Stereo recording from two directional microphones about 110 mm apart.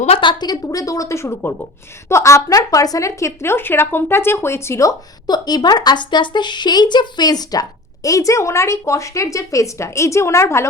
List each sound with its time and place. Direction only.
0.2 s a woman's voice: 45° left (ahead or behind); by 10.7 s 25° left (ahead or behind)